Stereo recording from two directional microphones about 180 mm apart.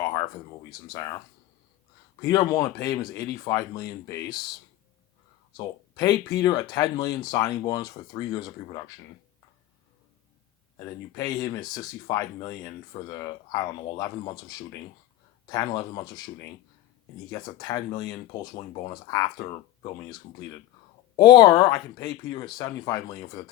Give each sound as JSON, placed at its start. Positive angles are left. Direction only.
{"t": 0.0, "sound": "a sound", "side_deg": 20}
{"t": 0.7, "sound": "speech", "side_deg": 20}
{"t": 2.2, "sound": "speech", "side_deg": 20}
{"t": 5.5, "sound": "speech", "side_deg": 20}
{"t": 11.2, "sound": "speech", "side_deg": 20}
{"t": 21.2, "sound": "speech", "side_deg": 20}